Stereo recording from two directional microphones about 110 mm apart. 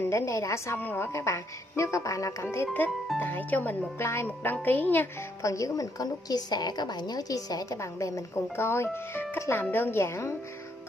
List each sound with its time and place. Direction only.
0.0 s a woman's voice: 25° left (ahead or behind)
5.4 s a woman's voice: 30° left (ahead or behind)